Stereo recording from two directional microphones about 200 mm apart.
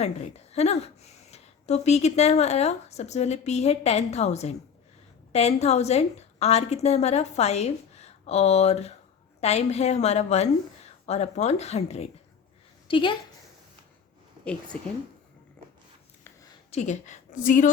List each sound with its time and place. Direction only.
0.0 s a woman's voice: 35° left (ahead or behind)
14.4 s a woman's voice: 5° left (ahead or behind)
15.6 s a sound: 5° left (ahead or behind)
16.7 s a woman's voice: 35° left (ahead or behind)